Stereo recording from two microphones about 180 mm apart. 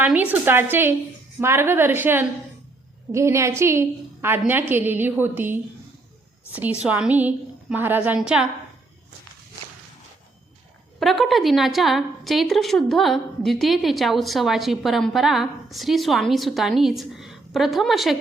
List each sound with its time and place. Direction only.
0.0 s a woman's voice: 10° right (ahead or behind)
11.0 s a woman's voice: centre (ahead or behind)